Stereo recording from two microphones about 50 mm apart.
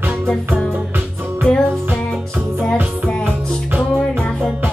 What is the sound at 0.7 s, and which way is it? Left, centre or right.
Music, right.